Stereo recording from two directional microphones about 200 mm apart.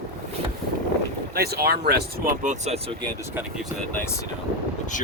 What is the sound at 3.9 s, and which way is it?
Speech, 10° left (ahead or behind).